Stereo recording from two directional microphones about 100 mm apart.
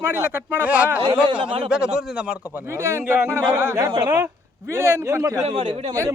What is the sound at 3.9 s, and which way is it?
Speech, 40° right (ahead or behind).